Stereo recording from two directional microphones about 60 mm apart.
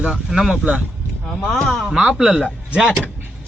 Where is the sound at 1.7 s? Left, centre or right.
Centre.